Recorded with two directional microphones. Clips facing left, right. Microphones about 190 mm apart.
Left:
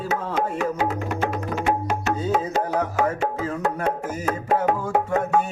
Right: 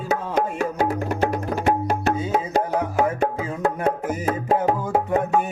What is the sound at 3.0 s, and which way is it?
Music, 10° right (ahead or behind).